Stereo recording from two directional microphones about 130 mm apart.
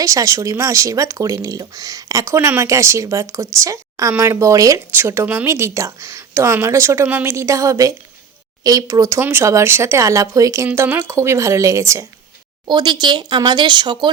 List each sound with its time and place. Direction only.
0.0 s speech: 25° right (ahead or behind)
12.6 s speech: 35° right (ahead or behind)